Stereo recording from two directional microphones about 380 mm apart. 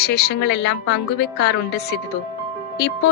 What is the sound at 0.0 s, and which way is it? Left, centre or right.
A woman's voice, left.